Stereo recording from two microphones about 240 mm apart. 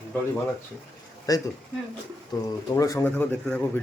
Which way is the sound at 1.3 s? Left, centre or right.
Centre.